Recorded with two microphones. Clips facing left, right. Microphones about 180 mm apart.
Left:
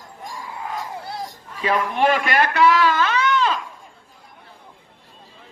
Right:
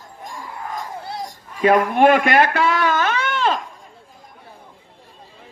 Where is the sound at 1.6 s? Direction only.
45° right (ahead or behind).